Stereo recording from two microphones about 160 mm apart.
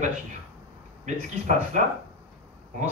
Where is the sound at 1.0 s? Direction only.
50° right (ahead or behind).